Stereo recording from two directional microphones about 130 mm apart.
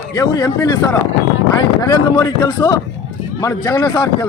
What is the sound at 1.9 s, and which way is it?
Speech, 30° left (ahead or behind).